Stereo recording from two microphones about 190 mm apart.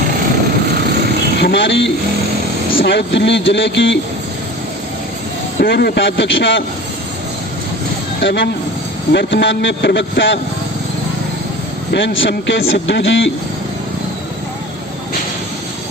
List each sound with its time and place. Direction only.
1.4 s a man's voice: 70° left (ahead or behind)
5.5 s a man's voice: 55° left (ahead or behind); by 6.6 s 75° left (ahead or behind)
8.2 s a man's voice: 70° left (ahead or behind)
11.9 s a man's voice: 70° left (ahead or behind)